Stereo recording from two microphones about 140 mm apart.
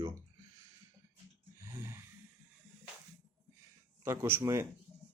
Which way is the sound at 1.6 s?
20° right (ahead or behind).